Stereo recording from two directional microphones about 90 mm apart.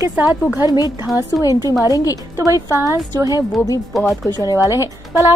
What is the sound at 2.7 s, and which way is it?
Speech, 35° right (ahead or behind).